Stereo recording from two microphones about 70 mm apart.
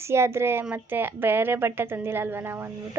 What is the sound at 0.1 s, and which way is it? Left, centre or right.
A woman's voice, right.